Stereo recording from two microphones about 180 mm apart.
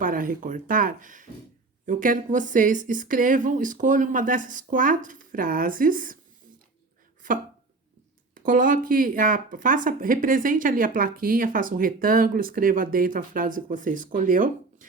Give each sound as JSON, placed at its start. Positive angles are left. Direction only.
{"t": 0.0, "sound": "speech", "side_deg": -50}
{"t": 8.4, "sound": "speech", "side_deg": -50}